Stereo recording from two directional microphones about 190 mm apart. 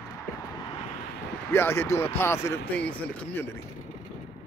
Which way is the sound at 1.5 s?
15° left (ahead or behind).